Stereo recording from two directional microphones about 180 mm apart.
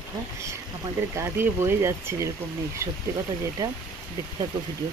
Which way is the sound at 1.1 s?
15° right (ahead or behind).